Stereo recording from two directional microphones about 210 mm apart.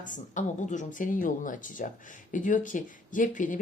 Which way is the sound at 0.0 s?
35° left (ahead or behind).